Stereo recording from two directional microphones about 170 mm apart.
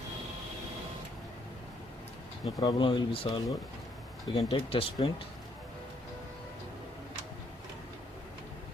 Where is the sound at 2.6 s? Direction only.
30° left (ahead or behind).